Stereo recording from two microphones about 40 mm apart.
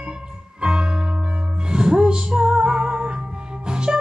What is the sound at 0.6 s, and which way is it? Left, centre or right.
Music, right.